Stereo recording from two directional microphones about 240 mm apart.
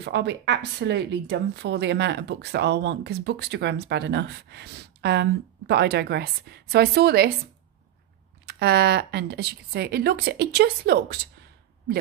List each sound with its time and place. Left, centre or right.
0.0 s speech: right
8.5 s speech: right